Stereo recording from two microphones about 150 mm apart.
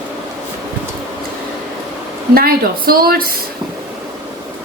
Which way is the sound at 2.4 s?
80° right.